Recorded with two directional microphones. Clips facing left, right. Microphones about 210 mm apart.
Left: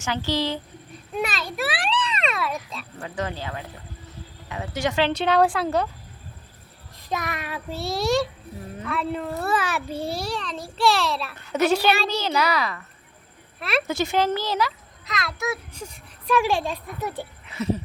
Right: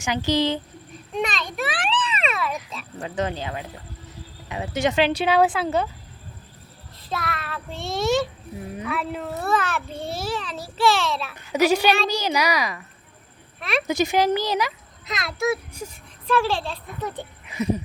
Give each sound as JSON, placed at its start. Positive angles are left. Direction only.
{"t": 0.0, "sound": "a child's voice", "side_deg": -15}
{"t": 1.1, "sound": "a sound", "side_deg": 5}
{"t": 3.0, "sound": "a child's voice", "side_deg": -20}
{"t": 7.0, "sound": "child singing", "side_deg": 15}
{"t": 8.8, "sound": "a child's voice", "side_deg": -5}
{"t": 10.0, "sound": "a child's voice", "side_deg": 0}
{"t": 13.6, "sound": "speech", "side_deg": 0}
{"t": 13.8, "sound": "a child's voice", "side_deg": -15}
{"t": 16.2, "sound": "child singing", "side_deg": 15}
{"t": 17.4, "sound": "a sound", "side_deg": -15}